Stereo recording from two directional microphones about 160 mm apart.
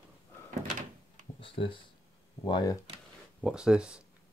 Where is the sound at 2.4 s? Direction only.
25° left (ahead or behind).